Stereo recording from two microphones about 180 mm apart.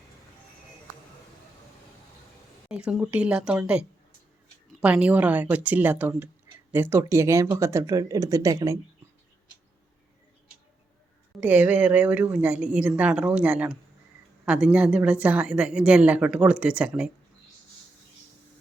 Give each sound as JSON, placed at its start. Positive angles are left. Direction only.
{"t": 2.6, "sound": "speech", "side_deg": -5}
{"t": 11.3, "sound": "speech", "side_deg": -10}